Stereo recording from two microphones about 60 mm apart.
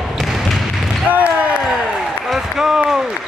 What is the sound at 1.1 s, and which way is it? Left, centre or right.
Basketball bounce, right.